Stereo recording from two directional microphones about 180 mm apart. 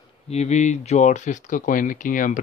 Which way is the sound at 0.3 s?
40° left (ahead or behind).